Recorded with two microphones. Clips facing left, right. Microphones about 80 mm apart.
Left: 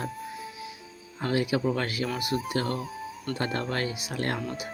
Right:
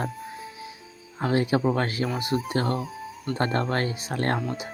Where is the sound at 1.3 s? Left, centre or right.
Right.